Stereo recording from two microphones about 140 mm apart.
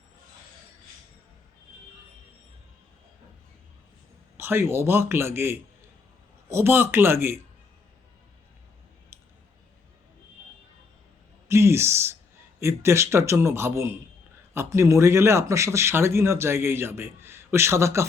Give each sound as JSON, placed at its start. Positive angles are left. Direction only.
{"t": 4.4, "sound": "speech", "side_deg": -15}
{"t": 9.1, "sound": "scissors", "side_deg": -15}
{"t": 11.4, "sound": "a sound", "side_deg": -20}
{"t": 12.5, "sound": "speech", "side_deg": -20}